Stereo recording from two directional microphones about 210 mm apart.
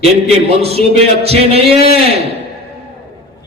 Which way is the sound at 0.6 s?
30° right (ahead or behind).